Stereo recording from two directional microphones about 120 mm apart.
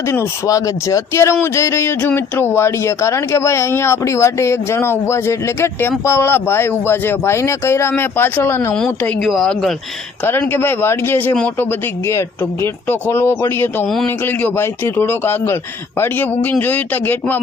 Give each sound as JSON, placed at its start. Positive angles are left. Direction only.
{"t": 0.1, "sound": "speech", "side_deg": 25}
{"t": 8.7, "sound": "speech", "side_deg": 5}
{"t": 10.2, "sound": "speech", "side_deg": 20}
{"t": 13.8, "sound": "speech", "side_deg": 5}
{"t": 14.3, "sound": "a man's voice", "side_deg": 20}